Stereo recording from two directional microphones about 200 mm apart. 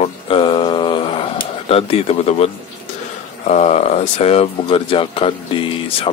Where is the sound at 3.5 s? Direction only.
35° left (ahead or behind).